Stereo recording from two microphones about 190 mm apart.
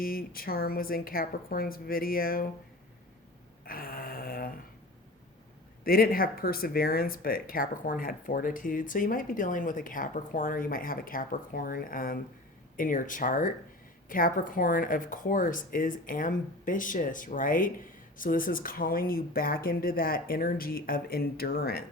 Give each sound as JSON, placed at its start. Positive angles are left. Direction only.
{"t": 0.0, "sound": "speech", "side_deg": 50}
{"t": 3.6, "sound": "a sound", "side_deg": 50}
{"t": 5.8, "sound": "speech", "side_deg": 50}